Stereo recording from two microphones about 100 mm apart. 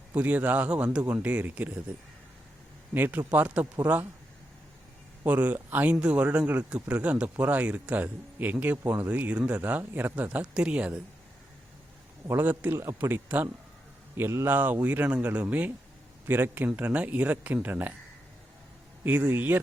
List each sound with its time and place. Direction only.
0.1 s speech: 15° right (ahead or behind)
2.9 s speech: 20° right (ahead or behind)
5.2 s speech: 15° right (ahead or behind)
12.3 s speech: 20° right (ahead or behind)
19.0 s speech: 20° right (ahead or behind)